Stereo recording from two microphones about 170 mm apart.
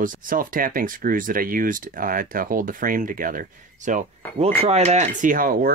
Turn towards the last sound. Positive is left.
turn(degrees=-55)  # may be behind; listen again after turning